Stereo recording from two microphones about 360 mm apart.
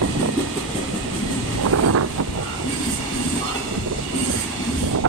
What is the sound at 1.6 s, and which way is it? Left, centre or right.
Vehicle, right.